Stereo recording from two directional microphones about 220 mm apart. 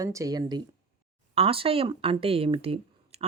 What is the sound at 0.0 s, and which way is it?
Speech, 15° right (ahead or behind).